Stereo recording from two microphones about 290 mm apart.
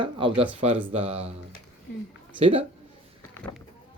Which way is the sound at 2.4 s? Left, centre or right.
Centre.